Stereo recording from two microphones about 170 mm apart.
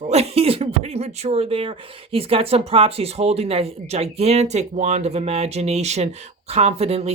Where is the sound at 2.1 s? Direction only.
35° right (ahead or behind).